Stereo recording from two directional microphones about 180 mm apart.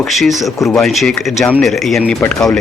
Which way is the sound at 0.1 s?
Centre (ahead or behind).